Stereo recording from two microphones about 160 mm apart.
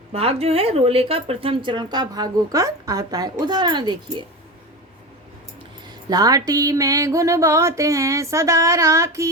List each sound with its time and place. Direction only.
0.1 s speech: 40° right (ahead or behind)
5.9 s speech: 25° right (ahead or behind)